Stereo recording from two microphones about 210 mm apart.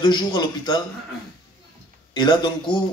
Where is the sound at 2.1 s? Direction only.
20° left (ahead or behind).